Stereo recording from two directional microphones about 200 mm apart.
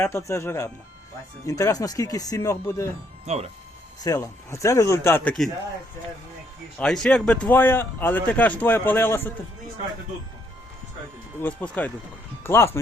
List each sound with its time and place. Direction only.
0.0 s speech: 15° left (ahead or behind)
3.3 s speech: 30° right (ahead or behind)
4.0 s speech: 15° left (ahead or behind)
6.7 s speech: 5° left (ahead or behind)
11.3 s speech: 10° left (ahead or behind)